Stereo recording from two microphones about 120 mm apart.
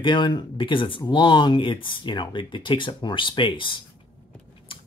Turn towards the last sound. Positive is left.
turn(degrees=45)  # may be behind; listen again after turning